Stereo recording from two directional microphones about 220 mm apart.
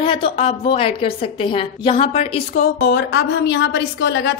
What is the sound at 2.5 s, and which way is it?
A woman's voice, 45° left (ahead or behind).